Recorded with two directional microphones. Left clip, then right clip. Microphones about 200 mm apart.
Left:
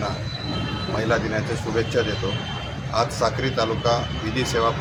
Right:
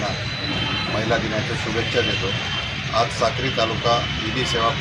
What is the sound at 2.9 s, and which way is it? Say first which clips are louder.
Speech: right 1 dB; 5° left (ahead or behind).